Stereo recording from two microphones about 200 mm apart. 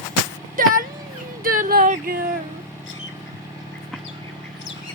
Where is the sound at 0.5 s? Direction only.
45° right (ahead or behind).